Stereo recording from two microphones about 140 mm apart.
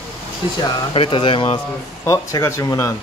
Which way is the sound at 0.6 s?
40° left (ahead or behind).